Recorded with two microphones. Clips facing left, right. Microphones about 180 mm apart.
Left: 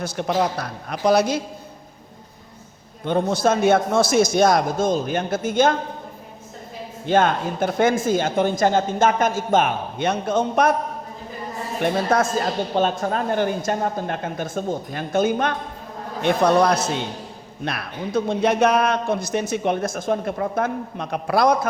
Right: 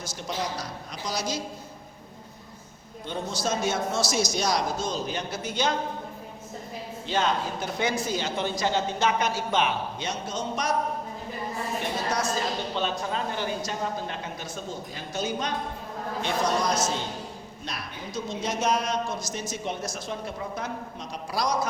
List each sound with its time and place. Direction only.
0.0 s a man's voice: 60° left (ahead or behind)
3.0 s a man's voice: 60° left (ahead or behind)
7.0 s a woman's voice: 55° left (ahead or behind)
11.8 s a woman's voice: 55° left (ahead or behind)